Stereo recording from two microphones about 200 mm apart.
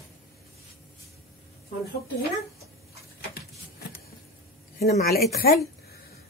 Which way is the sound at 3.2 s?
50° left (ahead or behind).